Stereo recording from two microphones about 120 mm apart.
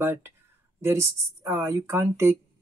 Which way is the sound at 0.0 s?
20° right (ahead or behind).